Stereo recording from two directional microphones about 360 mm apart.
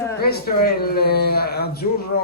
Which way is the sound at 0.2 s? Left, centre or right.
Left.